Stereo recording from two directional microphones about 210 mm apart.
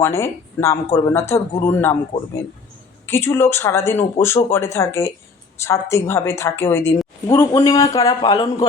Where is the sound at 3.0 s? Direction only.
10° left (ahead or behind).